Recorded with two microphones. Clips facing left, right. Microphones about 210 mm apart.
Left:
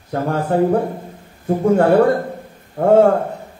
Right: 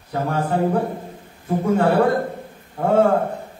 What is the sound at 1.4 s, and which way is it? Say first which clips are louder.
Speech: left 4 dB; 55° left (ahead or behind).